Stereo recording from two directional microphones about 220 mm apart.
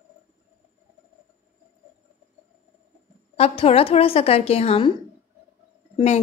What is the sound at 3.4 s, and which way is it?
Speech, 25° left (ahead or behind).